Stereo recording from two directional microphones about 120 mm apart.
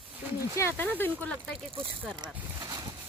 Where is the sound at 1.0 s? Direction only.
10° left (ahead or behind).